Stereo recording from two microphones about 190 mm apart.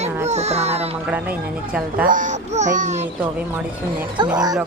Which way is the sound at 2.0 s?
45° right (ahead or behind).